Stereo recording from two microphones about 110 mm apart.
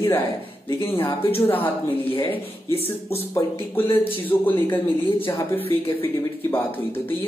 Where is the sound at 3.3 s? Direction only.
20° left (ahead or behind).